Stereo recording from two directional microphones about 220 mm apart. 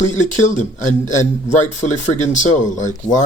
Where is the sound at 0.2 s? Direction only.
35° left (ahead or behind).